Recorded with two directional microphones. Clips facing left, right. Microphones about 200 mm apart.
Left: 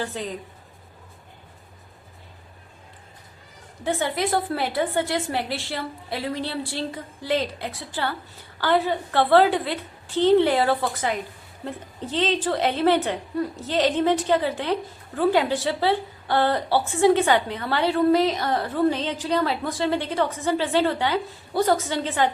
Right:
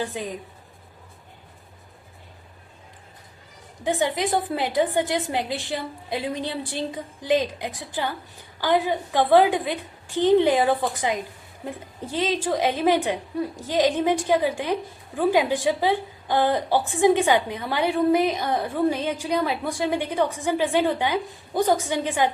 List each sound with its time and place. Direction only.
0.0 s a woman's voice: 15° right (ahead or behind)
3.8 s a woman's voice: 15° right (ahead or behind)